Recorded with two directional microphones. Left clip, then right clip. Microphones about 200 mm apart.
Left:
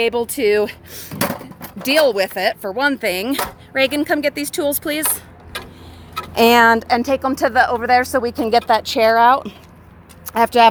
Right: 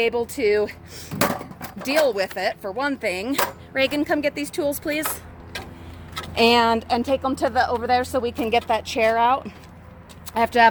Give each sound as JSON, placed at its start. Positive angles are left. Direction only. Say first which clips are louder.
{"t": 0.0, "sound": "chopping", "louder": "left 4 dB", "side_deg": 40}
{"t": 7.2, "sound": "speech", "louder": "left 6 dB", "side_deg": 45}
{"t": 10.3, "sound": "chopping", "louder": "left 4 dB", "side_deg": 30}